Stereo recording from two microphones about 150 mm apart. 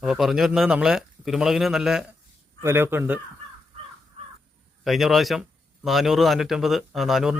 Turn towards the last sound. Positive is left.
turn(degrees=0)  # may be behind; listen again after turning